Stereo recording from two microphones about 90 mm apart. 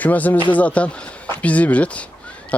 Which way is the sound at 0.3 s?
65° left (ahead or behind).